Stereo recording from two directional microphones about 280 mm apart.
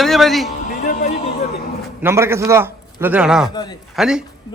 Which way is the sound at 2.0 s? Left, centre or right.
Centre.